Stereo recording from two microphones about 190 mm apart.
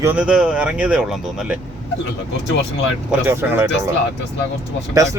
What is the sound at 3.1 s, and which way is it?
Speech, 10° right (ahead or behind).